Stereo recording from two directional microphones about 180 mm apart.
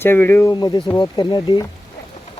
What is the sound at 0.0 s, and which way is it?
Speech, 15° left (ahead or behind).